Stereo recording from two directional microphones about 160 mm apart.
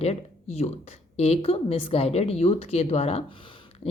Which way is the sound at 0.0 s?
40° left (ahead or behind).